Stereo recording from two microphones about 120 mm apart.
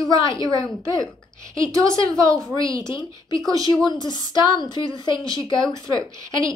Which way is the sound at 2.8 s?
40° left (ahead or behind).